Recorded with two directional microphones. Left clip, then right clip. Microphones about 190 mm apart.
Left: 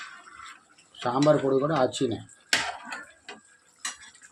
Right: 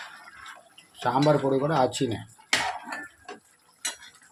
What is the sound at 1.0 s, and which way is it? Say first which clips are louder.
Speech: even; 10° right (ahead or behind).